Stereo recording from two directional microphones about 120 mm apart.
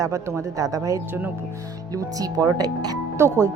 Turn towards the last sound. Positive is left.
turn(degrees=-30)  # may be behind; listen again after turning